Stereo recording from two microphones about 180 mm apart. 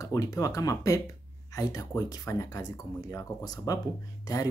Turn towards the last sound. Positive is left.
turn(degrees=20)  # may be behind; listen again after turning